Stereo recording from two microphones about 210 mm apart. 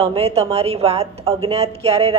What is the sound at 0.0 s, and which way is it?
A woman's voice, 25° right (ahead or behind).